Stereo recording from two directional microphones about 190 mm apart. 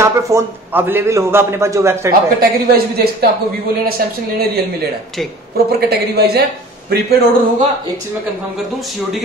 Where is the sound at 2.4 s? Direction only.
50° right (ahead or behind).